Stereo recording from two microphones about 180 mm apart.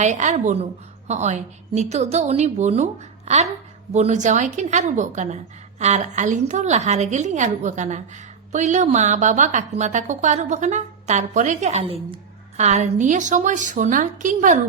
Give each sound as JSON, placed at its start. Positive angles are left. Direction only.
{"t": 0.0, "sound": "a woman's voice", "side_deg": -40}